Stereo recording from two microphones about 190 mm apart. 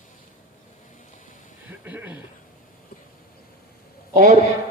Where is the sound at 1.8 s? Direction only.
10° right (ahead or behind).